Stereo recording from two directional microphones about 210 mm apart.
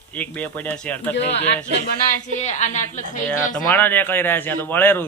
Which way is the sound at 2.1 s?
35° left (ahead or behind).